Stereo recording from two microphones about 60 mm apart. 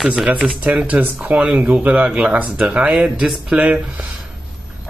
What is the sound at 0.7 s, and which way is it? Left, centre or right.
Speech, right.